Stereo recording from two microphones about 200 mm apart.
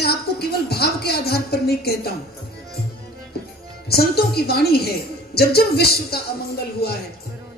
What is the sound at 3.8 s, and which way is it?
Speech, 50° left (ahead or behind).